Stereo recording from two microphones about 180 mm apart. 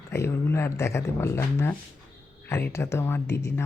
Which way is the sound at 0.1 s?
15° left (ahead or behind).